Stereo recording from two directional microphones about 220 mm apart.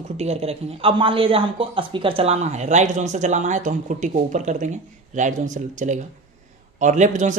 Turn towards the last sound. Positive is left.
turn(degrees=-35)  # may be behind; listen again after turning